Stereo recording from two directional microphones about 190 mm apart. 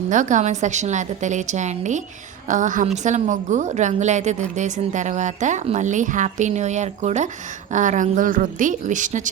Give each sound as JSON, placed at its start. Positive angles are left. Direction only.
{"t": 0.1, "sound": "a woman's voice", "side_deg": -40}